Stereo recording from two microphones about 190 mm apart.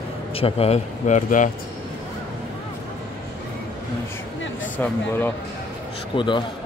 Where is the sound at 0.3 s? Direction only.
30° left (ahead or behind).